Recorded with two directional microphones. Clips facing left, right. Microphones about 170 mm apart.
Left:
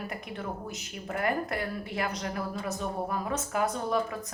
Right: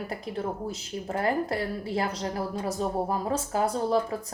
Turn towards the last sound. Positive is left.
turn(degrees=-30)  # may be behind; listen again after turning